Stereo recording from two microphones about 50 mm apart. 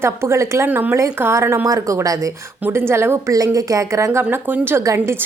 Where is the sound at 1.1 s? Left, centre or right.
Right.